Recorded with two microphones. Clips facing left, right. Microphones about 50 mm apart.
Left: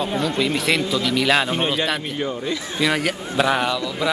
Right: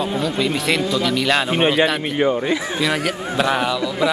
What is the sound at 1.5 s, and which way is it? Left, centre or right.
A man's voice, right.